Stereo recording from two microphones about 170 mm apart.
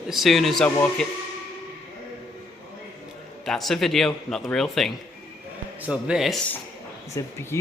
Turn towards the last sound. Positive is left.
turn(degrees=15)  # may be behind; listen again after turning